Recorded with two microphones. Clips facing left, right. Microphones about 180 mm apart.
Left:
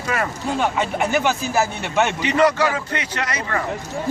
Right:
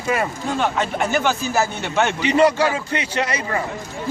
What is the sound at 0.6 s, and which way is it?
A man's voice, centre (ahead or behind).